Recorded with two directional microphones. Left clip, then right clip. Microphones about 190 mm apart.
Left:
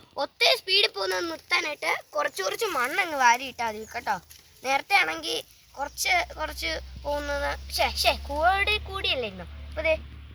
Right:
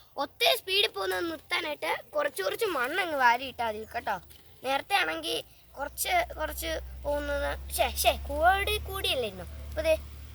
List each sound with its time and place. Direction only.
0.2 s a child's voice: 15° left (ahead or behind)